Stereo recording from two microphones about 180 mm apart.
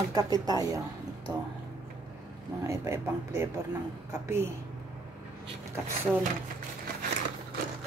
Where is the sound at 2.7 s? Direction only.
15° right (ahead or behind).